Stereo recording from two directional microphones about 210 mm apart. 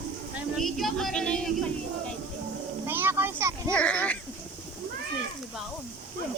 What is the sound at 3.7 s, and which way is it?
Speech, 5° left (ahead or behind).